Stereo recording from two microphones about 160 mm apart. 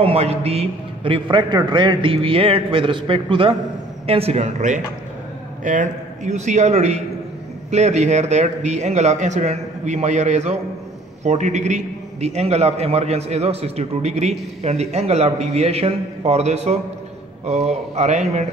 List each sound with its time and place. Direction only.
0.0 s a man's voice: 40° right (ahead or behind)